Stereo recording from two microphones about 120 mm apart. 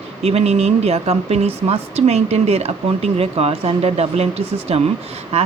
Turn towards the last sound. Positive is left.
turn(degrees=-60)  # may be behind; listen again after turning